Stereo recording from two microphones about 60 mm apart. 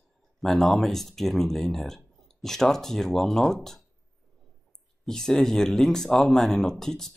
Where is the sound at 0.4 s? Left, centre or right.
Centre.